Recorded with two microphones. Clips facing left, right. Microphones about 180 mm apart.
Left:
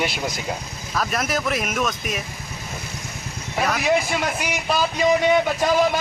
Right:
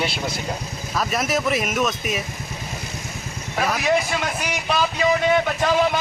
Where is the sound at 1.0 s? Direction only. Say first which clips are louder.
Right 1 dB; centre (ahead or behind).